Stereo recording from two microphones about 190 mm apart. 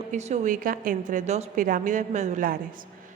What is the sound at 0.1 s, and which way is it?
A woman's voice, 40° right (ahead or behind).